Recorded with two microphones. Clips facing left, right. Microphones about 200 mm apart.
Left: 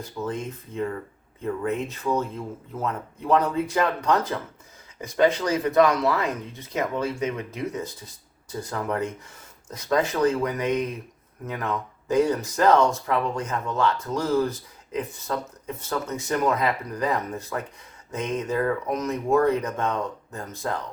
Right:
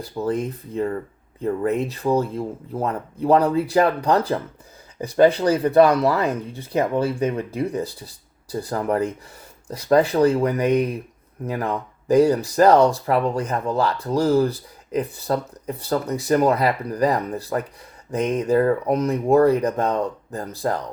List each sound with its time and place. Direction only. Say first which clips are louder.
0.0 s speech: right 6 dB; 35° right (ahead or behind)